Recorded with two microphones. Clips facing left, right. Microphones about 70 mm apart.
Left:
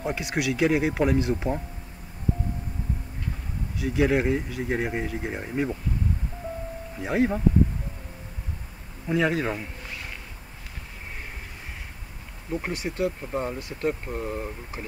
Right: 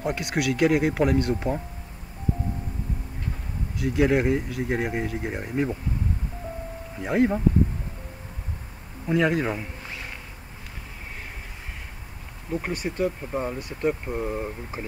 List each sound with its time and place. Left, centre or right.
0.1 s speech: centre
3.7 s speech: centre
7.0 s speech: centre
9.1 s speech: centre
12.5 s speech: centre